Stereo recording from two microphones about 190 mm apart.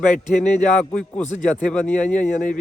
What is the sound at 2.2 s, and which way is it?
Speech, 40° left (ahead or behind).